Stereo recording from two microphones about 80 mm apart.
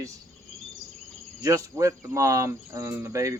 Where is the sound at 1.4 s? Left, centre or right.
Right.